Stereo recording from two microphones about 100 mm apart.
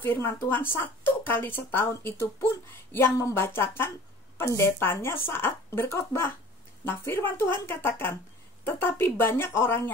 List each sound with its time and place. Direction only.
0.0 s speech: 25° left (ahead or behind)